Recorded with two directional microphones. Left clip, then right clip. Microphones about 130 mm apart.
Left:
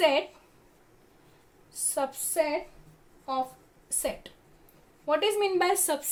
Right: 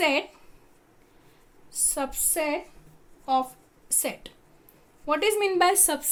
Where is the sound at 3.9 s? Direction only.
40° right (ahead or behind).